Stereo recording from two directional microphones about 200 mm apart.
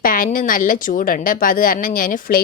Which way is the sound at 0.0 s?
45° left (ahead or behind).